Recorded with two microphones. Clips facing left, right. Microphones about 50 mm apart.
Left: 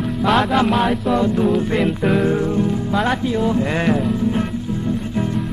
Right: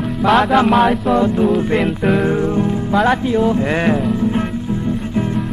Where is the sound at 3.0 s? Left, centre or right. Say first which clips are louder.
Right 4 dB; right.